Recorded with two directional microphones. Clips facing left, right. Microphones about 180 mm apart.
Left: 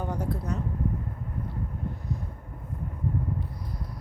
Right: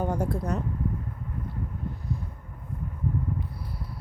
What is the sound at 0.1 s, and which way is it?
Speech, 50° right (ahead or behind).